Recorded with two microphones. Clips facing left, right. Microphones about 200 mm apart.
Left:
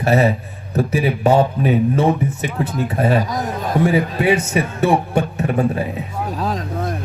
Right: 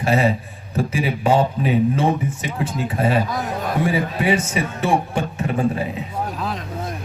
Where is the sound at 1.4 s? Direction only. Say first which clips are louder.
Left 2 dB; 60° left (ahead or behind).